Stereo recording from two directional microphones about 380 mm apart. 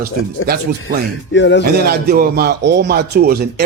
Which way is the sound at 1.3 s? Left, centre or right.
Left.